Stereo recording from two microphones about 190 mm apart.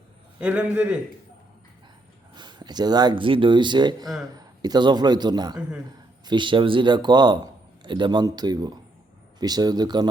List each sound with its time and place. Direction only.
0.3 s a man's voice: 5° right (ahead or behind)
2.3 s a man's voice: 25° right (ahead or behind)